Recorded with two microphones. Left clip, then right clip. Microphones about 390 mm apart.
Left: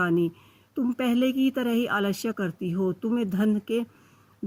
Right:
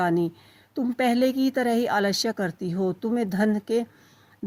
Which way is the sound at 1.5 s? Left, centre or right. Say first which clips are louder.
Right 3 dB; centre.